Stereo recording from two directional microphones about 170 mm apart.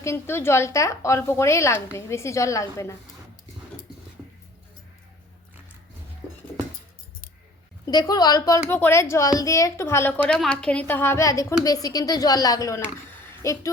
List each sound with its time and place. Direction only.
0.0 s a woman's voice: 15° left (ahead or behind)
7.9 s a woman's voice: 25° left (ahead or behind)